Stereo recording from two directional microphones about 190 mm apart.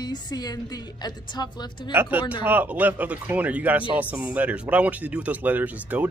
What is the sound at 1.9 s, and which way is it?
Speech, 10° right (ahead or behind).